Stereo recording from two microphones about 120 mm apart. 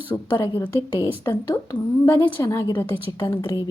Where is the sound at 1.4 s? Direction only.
25° left (ahead or behind).